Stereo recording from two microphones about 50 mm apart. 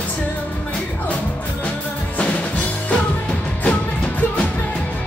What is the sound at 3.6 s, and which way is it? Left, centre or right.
Music, left.